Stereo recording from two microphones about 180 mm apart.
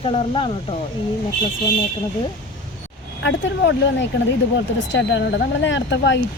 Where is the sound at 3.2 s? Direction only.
80° left.